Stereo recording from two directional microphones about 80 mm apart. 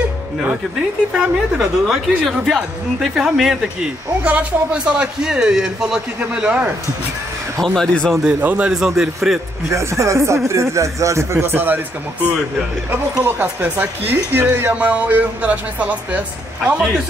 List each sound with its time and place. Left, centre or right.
1.1 s speech: centre
4.2 s speech: centre
7.6 s speech: centre
8.2 s speech: centre
9.7 s speech: right
11.5 s a man's voice: right
13.2 s a man's voice: right